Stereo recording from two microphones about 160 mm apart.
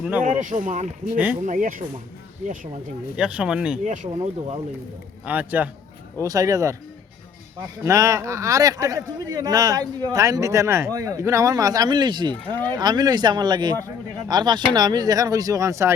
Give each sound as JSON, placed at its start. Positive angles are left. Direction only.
{"t": 0.2, "sound": "speech", "side_deg": -50}
{"t": 1.1, "sound": "a man's voice", "side_deg": -10}
{"t": 1.4, "sound": "speech", "side_deg": -55}
{"t": 3.2, "sound": "speech", "side_deg": -5}
{"t": 3.8, "sound": "speech", "side_deg": -45}
{"t": 5.2, "sound": "a man's voice", "side_deg": -10}
{"t": 6.1, "sound": "speech", "side_deg": -20}
{"t": 7.9, "sound": "speech", "side_deg": -20}